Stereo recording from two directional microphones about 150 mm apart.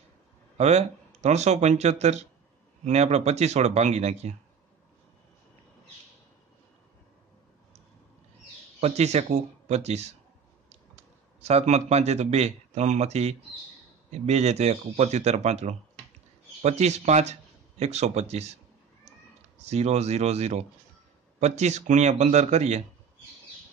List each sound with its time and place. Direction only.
0.6 s speech: 50° right (ahead or behind)
8.8 s speech: 45° right (ahead or behind)
19.6 s speech: 45° right (ahead or behind)